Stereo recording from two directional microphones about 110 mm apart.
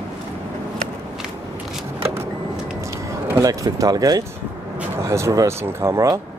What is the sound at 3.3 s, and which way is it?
Speech, 30° right (ahead or behind).